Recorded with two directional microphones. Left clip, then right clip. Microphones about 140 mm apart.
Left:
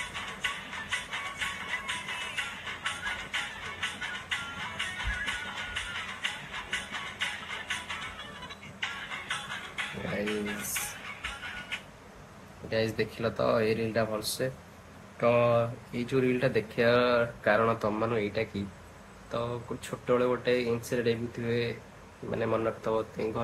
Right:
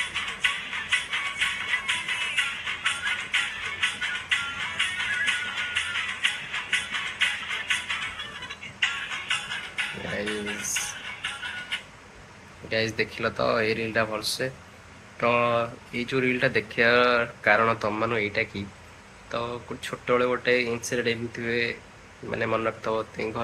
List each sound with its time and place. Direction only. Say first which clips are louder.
0.0 s music: right 8 dB; 45° left (ahead or behind)
9.6 s music: right 5 dB; 30° left (ahead or behind)
12.6 s speech: right 3 dB; 15° left (ahead or behind)